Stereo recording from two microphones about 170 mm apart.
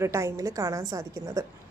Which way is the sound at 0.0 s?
15° right (ahead or behind).